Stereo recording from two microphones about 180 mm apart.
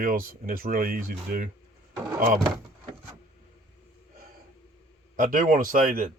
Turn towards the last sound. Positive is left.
turn(degrees=-50)  # may be behind; listen again after turning